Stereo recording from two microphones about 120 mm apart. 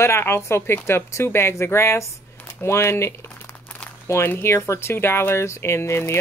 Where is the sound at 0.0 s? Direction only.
20° left (ahead or behind).